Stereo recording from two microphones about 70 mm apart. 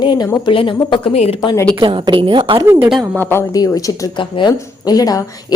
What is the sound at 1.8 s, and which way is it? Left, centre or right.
Speech, right.